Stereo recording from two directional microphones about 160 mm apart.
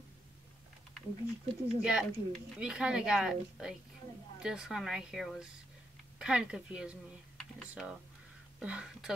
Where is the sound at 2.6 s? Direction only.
5° right (ahead or behind).